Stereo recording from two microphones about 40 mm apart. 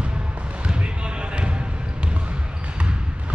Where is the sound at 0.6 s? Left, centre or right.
Right.